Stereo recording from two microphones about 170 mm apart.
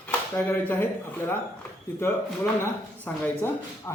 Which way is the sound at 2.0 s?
15° left (ahead or behind).